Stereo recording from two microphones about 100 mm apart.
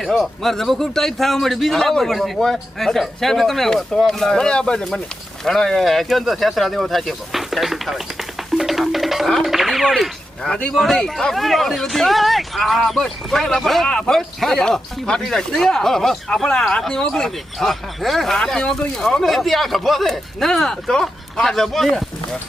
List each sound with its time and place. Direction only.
0.0 s speech: centre (ahead or behind)